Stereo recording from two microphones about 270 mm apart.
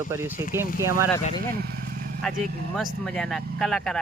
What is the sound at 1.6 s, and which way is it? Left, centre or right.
Vehicle, right.